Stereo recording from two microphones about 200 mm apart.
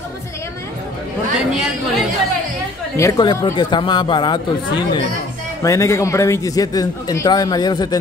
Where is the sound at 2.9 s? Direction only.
15° left (ahead or behind).